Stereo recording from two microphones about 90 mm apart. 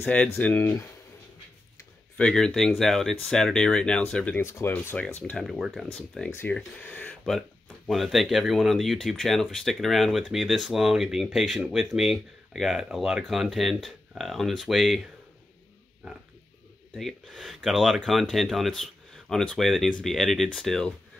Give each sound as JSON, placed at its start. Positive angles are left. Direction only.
{"t": 0.0, "sound": "speech", "side_deg": 15}
{"t": 2.1, "sound": "speech", "side_deg": 10}
{"t": 4.4, "sound": "speech", "side_deg": 30}
{"t": 4.9, "sound": "speech", "side_deg": 15}
{"t": 5.4, "sound": "speech", "side_deg": 0}
{"t": 5.9, "sound": "speech", "side_deg": 10}
{"t": 6.8, "sound": "a sound", "side_deg": 20}
{"t": 7.2, "sound": "speech", "side_deg": 5}
{"t": 16.9, "sound": "speech", "side_deg": 0}